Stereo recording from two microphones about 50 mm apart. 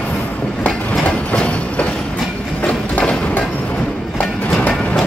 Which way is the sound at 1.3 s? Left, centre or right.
Left.